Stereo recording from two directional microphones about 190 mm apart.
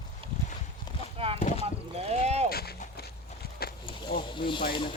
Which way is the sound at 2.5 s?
55° left (ahead or behind).